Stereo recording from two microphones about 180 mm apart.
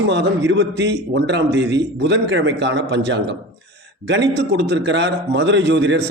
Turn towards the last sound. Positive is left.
turn(degrees=-80)